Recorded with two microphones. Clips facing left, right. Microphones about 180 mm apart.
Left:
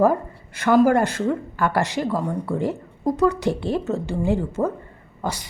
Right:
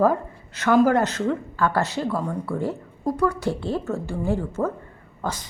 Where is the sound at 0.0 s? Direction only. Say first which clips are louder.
Left 2 dB; 10° left (ahead or behind).